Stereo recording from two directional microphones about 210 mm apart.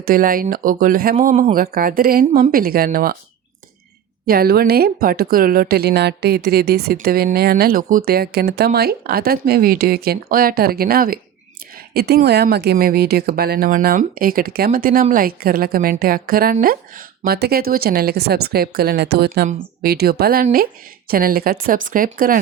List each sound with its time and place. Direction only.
0.0 s speech: 45° right (ahead or behind)
4.3 s speech: 45° right (ahead or behind)